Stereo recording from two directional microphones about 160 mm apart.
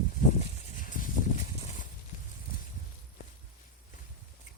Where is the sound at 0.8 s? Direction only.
55° left (ahead or behind).